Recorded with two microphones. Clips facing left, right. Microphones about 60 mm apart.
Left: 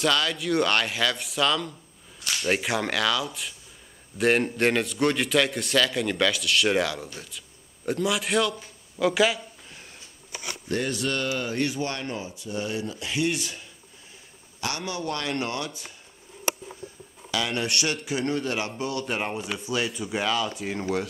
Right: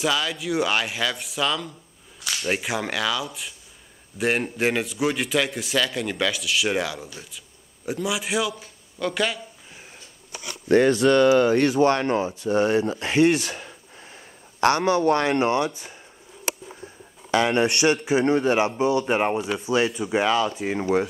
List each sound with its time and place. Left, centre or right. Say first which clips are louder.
0.0 s a man's voice: even; centre
8.9 s a sound: left 3 dB; centre
10.7 s a man's voice: right 11 dB; right
11.0 s speech: right 12 dB; right
14.6 s a man's voice: right 12 dB; right
17.3 s a man's voice: right 7 dB; right; by 20.8 s centre